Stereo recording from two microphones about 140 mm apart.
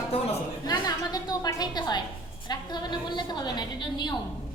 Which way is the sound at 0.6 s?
30° left (ahead or behind).